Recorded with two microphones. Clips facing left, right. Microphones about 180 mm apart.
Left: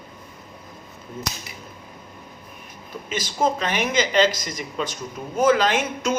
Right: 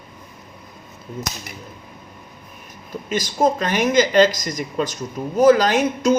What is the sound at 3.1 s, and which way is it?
A man's voice, 45° right (ahead or behind).